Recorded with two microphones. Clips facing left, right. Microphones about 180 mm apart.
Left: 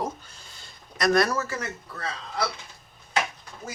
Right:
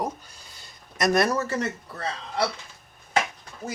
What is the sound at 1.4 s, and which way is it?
Speech, 35° right (ahead or behind).